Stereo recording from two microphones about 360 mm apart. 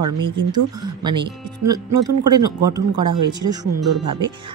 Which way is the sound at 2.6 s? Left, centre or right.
Centre.